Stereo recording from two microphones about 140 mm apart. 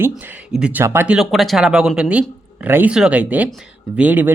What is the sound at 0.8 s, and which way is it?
Speech, 20° right (ahead or behind).